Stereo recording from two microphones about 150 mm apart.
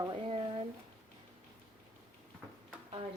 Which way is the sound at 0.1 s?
40° right (ahead or behind).